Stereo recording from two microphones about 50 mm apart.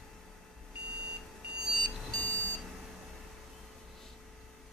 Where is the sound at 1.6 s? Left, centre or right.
Centre.